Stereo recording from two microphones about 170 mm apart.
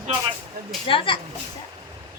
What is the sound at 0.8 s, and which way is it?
Speech, 30° left (ahead or behind).